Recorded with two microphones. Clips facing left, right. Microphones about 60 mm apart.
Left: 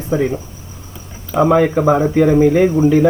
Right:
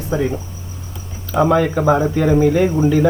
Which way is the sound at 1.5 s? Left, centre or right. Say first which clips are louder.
Left 3 dB; centre.